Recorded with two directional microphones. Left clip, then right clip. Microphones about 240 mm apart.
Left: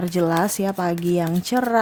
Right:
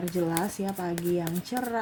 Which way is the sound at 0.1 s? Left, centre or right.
Left.